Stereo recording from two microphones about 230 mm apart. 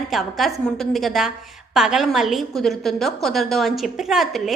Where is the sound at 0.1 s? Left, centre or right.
Centre.